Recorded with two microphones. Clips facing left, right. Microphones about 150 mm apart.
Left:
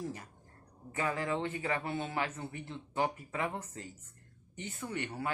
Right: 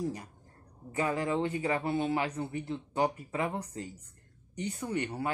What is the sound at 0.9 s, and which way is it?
Speech, 25° right (ahead or behind).